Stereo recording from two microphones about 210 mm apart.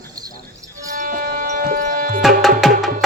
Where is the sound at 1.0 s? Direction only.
40° right (ahead or behind).